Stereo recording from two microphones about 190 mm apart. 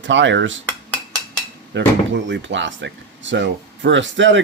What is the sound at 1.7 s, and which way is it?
A man's voice, 70° right (ahead or behind).